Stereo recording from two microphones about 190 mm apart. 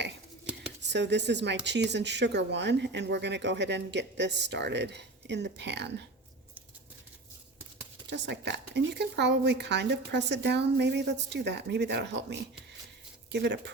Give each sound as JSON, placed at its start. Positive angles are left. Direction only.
{"t": 0.8, "sound": "a woman's voice", "side_deg": -65}
{"t": 8.1, "sound": "a woman's voice", "side_deg": -65}